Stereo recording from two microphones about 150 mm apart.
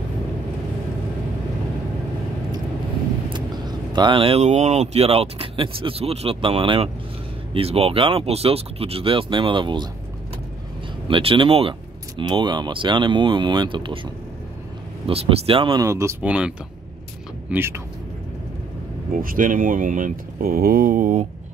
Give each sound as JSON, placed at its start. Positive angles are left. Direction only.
{"t": 3.3, "sound": "speech", "side_deg": -30}
{"t": 11.1, "sound": "speech", "side_deg": -35}
{"t": 15.0, "sound": "speech", "side_deg": -40}
{"t": 16.2, "sound": "speech", "side_deg": -5}
{"t": 19.2, "sound": "speech", "side_deg": -65}